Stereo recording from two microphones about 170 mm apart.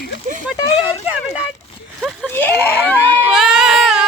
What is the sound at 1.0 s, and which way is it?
Speech, 5° right (ahead or behind).